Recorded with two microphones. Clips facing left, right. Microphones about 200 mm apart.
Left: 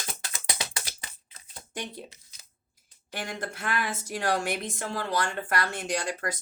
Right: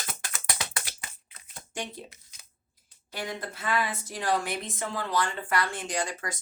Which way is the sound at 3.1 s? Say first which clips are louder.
Even; 80° left.